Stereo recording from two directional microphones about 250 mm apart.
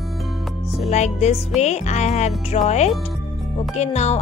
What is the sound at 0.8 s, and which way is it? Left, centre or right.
Speech, left.